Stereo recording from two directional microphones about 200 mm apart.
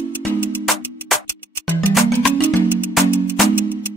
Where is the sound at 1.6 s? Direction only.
Centre (ahead or behind).